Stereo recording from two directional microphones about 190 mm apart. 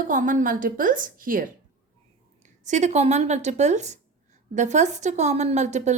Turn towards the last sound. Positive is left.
turn(degrees=-40)  # may be behind; listen again after turning